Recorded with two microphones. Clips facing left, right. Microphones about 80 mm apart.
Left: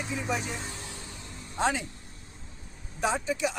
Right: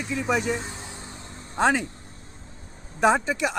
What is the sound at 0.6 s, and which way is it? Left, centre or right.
Vehicle, right.